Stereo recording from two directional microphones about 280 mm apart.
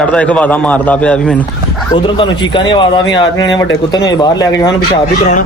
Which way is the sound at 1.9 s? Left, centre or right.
Centre.